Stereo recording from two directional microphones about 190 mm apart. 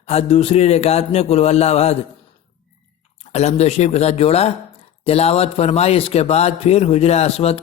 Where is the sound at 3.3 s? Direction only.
35° left (ahead or behind).